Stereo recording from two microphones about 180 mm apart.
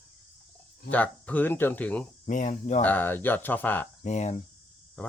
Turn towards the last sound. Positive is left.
turn(degrees=10)  # may be behind; listen again after turning